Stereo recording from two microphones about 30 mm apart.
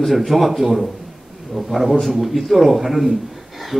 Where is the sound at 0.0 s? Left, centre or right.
Centre.